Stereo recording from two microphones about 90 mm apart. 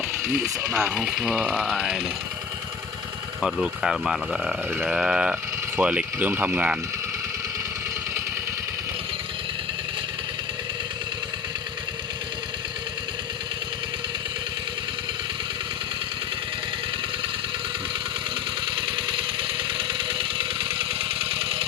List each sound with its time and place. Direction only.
0.7 s speech: 10° right (ahead or behind)
3.4 s speech: 5° right (ahead or behind)
18.8 s engine: 65° right (ahead or behind); by 21.6 s 85° right